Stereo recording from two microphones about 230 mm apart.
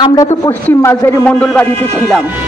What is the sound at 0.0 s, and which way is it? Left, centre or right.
A man's voice, centre.